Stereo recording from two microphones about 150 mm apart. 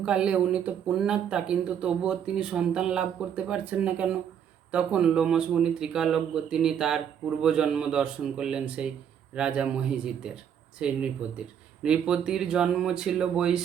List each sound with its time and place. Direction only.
0.0 s speech: 5° right (ahead or behind)